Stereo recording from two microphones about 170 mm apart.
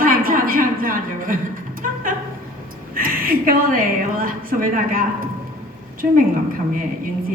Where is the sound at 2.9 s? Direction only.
55° right (ahead or behind).